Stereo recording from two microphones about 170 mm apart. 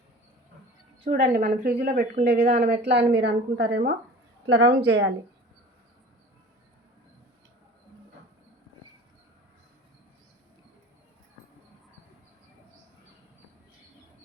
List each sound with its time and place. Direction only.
1.1 s a woman's voice: 60° right (ahead or behind)
2.2 s a woman's voice: 75° right (ahead or behind)